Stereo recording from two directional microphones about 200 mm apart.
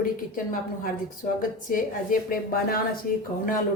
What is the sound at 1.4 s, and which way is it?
A woman's voice, 45° left (ahead or behind).